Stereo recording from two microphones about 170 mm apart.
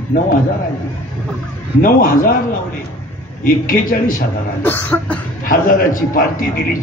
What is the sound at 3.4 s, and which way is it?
Speech, 55° left (ahead or behind).